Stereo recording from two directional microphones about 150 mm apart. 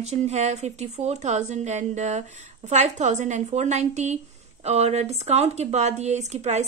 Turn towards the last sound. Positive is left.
turn(degrees=-50)  # may be behind; listen again after turning